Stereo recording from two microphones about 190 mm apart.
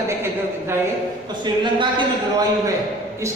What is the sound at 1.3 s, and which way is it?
Speech, 25° right (ahead or behind).